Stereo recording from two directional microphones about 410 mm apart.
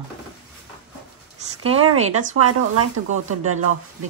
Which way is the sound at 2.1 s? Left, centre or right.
Right.